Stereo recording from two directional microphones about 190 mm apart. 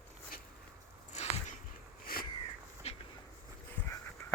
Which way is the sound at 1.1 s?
35° left (ahead or behind).